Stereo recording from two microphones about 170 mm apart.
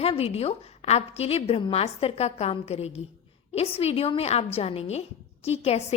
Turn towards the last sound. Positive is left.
turn(degrees=35)  # may be behind; listen again after turning